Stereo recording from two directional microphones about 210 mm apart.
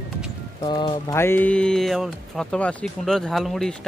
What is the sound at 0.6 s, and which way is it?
Speech, 20° left (ahead or behind).